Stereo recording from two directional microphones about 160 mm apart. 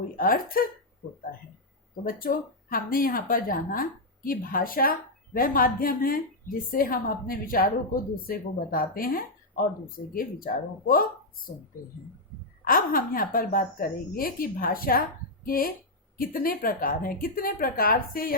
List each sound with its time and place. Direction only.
0.2 s speech: 65° left (ahead or behind)
2.0 s speech: 60° left (ahead or behind)
12.6 s speech: 65° left (ahead or behind)